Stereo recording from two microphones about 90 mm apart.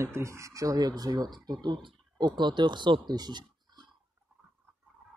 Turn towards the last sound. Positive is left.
turn(degrees=-55)  # may be behind; listen again after turning